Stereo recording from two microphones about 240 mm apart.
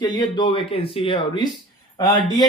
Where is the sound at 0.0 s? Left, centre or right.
Centre.